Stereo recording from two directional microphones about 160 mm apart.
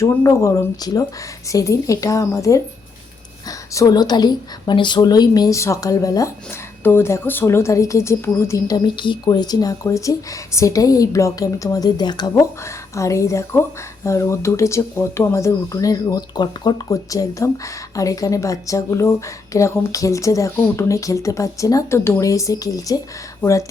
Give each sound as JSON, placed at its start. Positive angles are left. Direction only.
{"t": 0.0, "sound": "a woman's voice", "side_deg": 20}
{"t": 3.8, "sound": "a woman's voice", "side_deg": 25}